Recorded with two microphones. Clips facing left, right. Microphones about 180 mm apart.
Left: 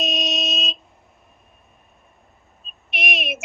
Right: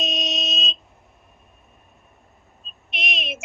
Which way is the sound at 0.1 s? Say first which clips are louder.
Left 3 dB; 60° left (ahead or behind).